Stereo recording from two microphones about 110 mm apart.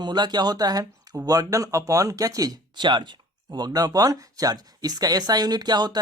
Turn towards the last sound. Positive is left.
turn(degrees=-40)  # may be behind; listen again after turning